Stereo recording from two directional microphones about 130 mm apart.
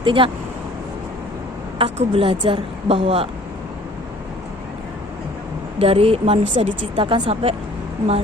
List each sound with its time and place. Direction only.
0.0 s speech: 40° right (ahead or behind)
2.0 s a woman's voice: 45° right (ahead or behind)
5.8 s a woman's voice: 50° right (ahead or behind)